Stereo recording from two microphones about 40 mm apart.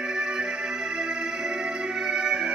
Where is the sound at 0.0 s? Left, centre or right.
Centre.